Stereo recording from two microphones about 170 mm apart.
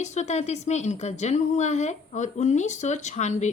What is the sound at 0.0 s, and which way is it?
A woman's voice, 45° left (ahead or behind).